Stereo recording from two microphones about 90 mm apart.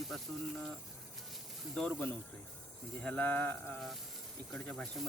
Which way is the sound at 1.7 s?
10° left (ahead or behind).